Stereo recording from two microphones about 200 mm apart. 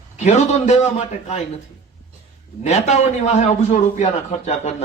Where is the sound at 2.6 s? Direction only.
35° left (ahead or behind).